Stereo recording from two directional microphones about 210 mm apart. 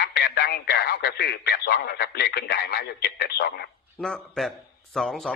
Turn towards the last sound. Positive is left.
turn(degrees=0)  # may be behind; listen again after turning